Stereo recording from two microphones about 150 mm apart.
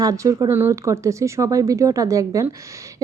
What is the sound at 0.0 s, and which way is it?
Speech, 25° right (ahead or behind).